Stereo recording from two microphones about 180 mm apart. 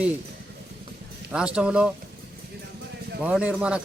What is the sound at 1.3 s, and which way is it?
Speech, 5° right (ahead or behind).